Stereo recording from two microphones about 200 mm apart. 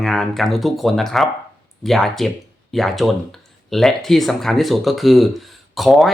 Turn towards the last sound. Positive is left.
turn(degrees=0)  # may be behind; listen again after turning